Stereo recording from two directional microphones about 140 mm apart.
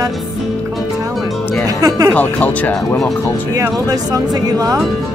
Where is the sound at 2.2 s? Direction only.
10° left (ahead or behind).